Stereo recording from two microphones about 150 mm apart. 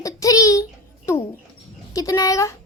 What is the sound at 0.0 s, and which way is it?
Child singing, 20° left (ahead or behind).